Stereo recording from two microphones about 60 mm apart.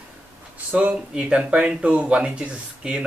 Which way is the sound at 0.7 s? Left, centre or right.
Centre.